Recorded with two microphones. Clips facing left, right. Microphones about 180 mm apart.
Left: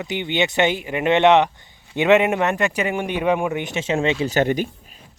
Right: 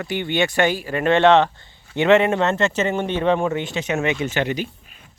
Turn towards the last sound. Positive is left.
turn(degrees=45)  # may be behind; listen again after turning